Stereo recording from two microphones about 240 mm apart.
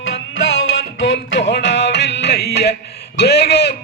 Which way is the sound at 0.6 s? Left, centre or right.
Left.